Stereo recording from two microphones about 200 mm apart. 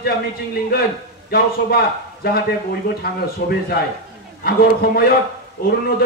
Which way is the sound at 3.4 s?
50° left (ahead or behind).